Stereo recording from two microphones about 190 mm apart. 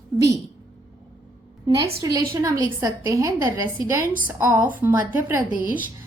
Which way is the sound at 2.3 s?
15° right (ahead or behind).